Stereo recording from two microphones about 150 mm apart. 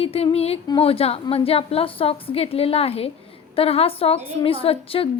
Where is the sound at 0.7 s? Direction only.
40° left (ahead or behind).